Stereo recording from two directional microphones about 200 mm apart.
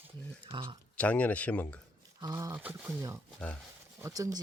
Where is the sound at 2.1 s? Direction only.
20° right (ahead or behind).